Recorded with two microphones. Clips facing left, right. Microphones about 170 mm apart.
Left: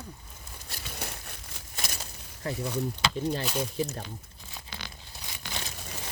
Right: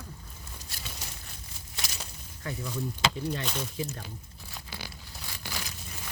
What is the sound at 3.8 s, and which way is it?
Speech, 35° left (ahead or behind).